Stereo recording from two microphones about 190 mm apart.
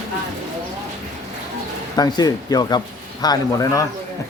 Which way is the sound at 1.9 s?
20° left (ahead or behind).